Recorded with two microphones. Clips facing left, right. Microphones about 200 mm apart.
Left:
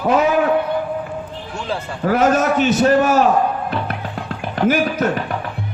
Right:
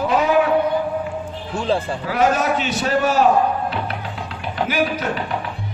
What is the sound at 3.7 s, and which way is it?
Music, 50° left (ahead or behind).